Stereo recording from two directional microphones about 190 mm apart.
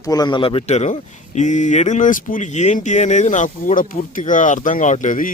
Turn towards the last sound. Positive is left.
turn(degrees=45)  # may be behind; listen again after turning